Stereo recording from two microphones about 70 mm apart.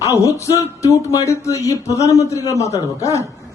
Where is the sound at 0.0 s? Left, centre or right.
Left.